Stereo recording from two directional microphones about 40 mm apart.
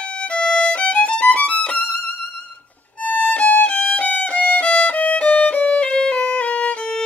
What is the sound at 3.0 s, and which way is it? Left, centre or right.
Violin, left.